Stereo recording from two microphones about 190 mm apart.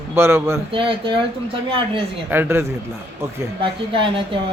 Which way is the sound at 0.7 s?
25° right (ahead or behind).